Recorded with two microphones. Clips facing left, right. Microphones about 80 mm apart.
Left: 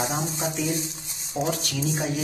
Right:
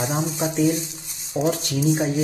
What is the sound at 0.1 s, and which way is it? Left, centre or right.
Speech, right.